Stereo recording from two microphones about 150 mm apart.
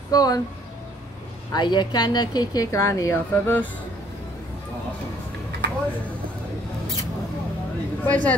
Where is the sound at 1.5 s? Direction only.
30° left (ahead or behind).